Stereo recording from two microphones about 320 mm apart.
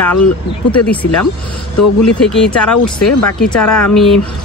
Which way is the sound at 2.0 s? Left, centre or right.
Centre.